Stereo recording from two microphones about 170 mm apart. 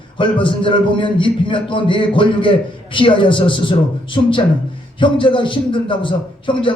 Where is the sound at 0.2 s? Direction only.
30° left (ahead or behind).